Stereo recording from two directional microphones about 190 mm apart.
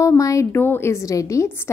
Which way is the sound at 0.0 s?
15° left (ahead or behind).